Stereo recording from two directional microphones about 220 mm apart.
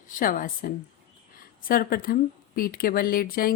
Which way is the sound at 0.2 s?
40° left (ahead or behind).